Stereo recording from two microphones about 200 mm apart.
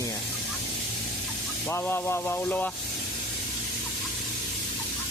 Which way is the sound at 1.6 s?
10° left (ahead or behind).